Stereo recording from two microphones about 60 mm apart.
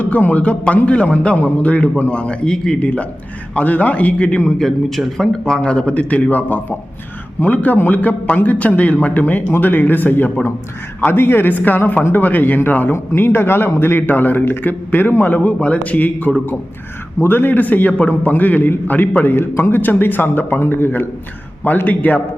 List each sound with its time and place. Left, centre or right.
0.0 s a man's voice: left
4.6 s a man's voice: centre; by 22.2 s left